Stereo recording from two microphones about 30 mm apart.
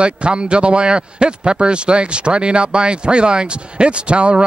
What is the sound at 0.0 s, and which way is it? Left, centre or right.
A man's voice, right.